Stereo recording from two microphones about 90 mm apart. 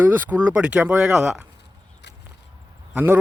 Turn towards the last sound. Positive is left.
turn(degrees=-20)  # may be behind; listen again after turning